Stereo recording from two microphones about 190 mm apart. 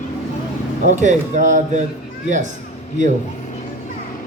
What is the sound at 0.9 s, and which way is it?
Speech, 40° right (ahead or behind).